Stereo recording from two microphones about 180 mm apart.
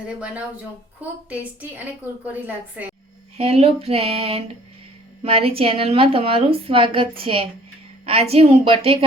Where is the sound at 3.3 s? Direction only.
35° right (ahead or behind).